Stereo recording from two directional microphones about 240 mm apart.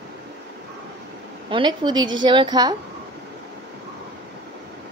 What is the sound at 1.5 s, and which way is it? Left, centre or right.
A woman's voice, centre.